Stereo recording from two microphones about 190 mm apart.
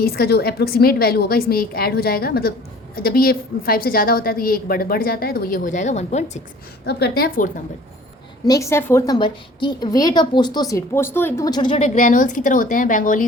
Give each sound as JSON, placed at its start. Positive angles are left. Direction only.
{"t": 0.0, "sound": "a woman's voice", "side_deg": 55}
{"t": 6.8, "sound": "a woman's voice", "side_deg": 55}
{"t": 8.4, "sound": "a woman's voice", "side_deg": 15}
{"t": 11.8, "sound": "a woman's voice", "side_deg": 40}